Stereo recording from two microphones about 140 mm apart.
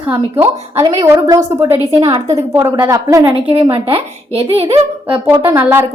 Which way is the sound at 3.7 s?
40° right (ahead or behind).